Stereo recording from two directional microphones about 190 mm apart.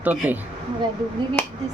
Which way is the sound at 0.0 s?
10° right (ahead or behind).